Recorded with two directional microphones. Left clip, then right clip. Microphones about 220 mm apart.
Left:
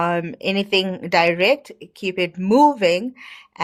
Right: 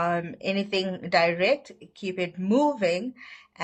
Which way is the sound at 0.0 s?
40° left (ahead or behind).